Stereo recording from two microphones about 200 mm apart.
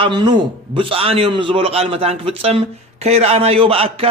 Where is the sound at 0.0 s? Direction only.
25° right (ahead or behind).